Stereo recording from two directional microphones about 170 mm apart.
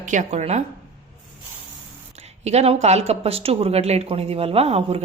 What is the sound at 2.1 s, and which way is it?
A woman's voice, 40° right (ahead or behind).